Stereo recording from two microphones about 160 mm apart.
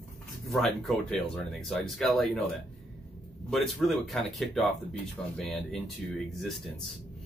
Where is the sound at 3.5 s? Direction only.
Centre (ahead or behind).